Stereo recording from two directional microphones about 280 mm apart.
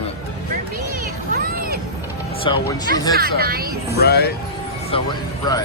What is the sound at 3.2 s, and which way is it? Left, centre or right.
Speech, right.